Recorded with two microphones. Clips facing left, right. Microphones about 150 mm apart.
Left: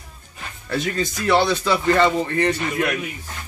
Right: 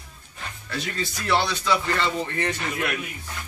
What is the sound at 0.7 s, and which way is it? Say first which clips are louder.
Speech: left 7 dB; 50° left (ahead or behind).